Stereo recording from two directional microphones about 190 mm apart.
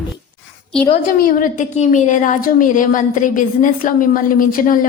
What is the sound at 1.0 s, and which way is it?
A woman's voice, 50° left (ahead or behind).